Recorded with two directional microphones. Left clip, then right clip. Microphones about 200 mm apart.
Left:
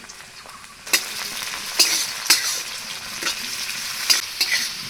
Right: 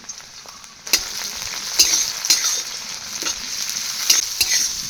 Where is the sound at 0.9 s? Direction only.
25° right (ahead or behind).